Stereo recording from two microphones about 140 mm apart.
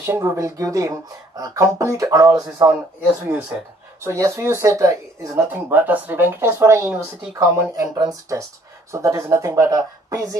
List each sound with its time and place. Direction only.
0.0 s speech: 20° right (ahead or behind)
4.0 s speech: 20° right (ahead or behind)